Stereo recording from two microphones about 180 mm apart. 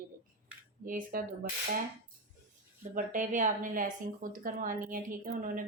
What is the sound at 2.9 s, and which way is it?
Speech, 45° right (ahead or behind).